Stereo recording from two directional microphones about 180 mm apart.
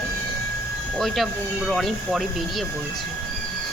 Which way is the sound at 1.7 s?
Centre (ahead or behind).